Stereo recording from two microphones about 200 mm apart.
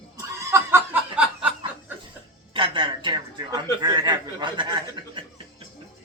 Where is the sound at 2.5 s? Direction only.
25° right (ahead or behind).